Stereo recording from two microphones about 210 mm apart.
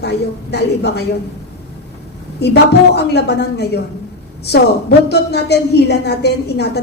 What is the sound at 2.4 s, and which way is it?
A woman's voice, 50° left (ahead or behind).